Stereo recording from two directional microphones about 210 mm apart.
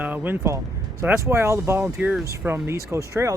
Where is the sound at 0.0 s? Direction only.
10° right (ahead or behind).